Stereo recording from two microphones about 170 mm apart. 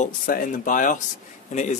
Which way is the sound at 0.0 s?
50° left (ahead or behind).